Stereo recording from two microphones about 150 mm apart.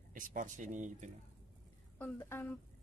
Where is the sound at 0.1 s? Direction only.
65° right (ahead or behind).